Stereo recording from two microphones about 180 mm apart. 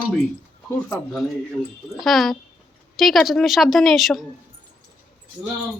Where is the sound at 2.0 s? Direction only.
Centre (ahead or behind).